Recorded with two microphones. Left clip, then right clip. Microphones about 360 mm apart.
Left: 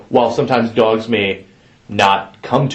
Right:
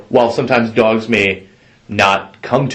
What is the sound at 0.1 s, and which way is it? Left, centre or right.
Speech, right.